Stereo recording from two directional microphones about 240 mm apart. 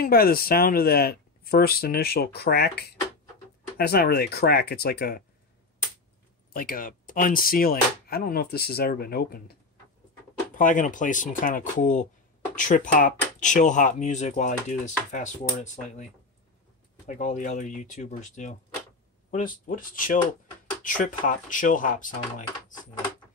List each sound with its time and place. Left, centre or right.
0.0 s speech: left
6.5 s speech: left
17.1 s speech: left